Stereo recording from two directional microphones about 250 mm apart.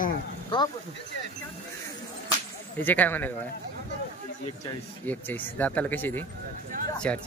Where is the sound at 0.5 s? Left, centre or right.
Centre.